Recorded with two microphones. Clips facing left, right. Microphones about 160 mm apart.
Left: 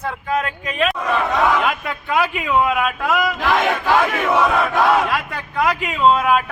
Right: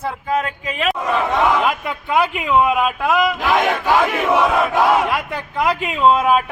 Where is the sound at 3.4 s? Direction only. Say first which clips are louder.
Right 1 dB; 5° right (ahead or behind).